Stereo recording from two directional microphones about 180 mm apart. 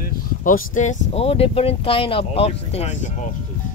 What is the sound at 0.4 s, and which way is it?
Speech, 50° left (ahead or behind).